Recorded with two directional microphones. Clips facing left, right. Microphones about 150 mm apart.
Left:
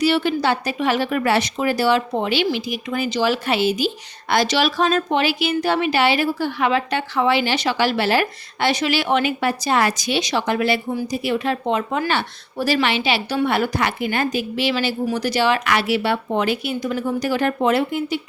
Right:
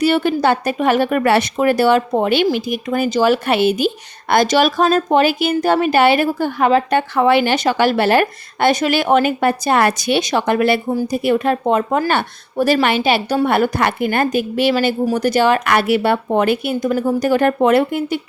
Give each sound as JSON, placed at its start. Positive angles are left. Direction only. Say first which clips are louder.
{"t": 0.0, "sound": "speech", "louder": "right 4 dB", "side_deg": -50}